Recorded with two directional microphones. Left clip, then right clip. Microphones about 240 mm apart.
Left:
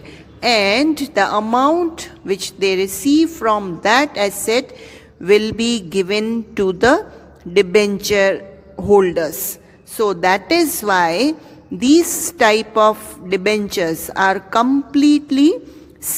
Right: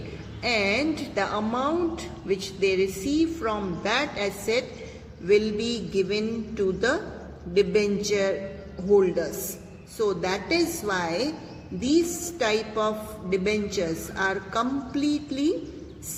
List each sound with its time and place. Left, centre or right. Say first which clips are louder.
0.4 s a woman's voice: left 10 dB; left